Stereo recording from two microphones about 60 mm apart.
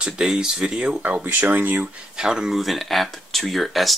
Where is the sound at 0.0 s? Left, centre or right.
Centre.